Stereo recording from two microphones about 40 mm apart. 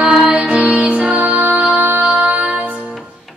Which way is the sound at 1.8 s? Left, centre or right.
Right.